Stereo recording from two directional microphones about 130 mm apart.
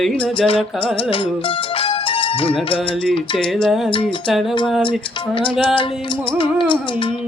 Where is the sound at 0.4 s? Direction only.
45° left (ahead or behind).